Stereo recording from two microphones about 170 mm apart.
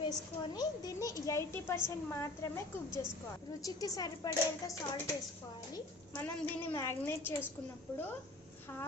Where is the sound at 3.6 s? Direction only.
20° left (ahead or behind).